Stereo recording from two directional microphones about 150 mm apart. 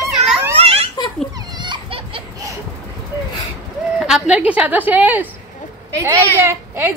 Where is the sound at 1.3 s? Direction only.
30° right (ahead or behind).